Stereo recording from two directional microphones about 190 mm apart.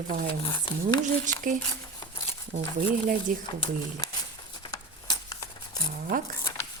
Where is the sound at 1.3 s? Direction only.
40° right (ahead or behind).